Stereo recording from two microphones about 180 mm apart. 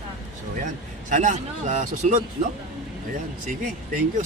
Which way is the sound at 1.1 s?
45° right (ahead or behind).